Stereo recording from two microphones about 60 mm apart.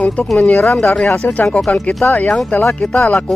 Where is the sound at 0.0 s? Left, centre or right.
Left.